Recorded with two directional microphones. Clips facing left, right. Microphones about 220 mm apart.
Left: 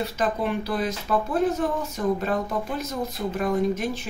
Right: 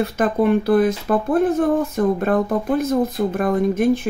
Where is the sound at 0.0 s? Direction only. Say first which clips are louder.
Right 8 dB; 55° right (ahead or behind).